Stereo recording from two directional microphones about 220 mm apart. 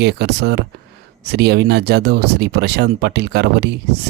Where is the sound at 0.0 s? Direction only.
50° right (ahead or behind).